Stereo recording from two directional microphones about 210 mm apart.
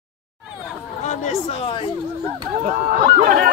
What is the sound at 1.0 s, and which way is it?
Speech, 30° left (ahead or behind).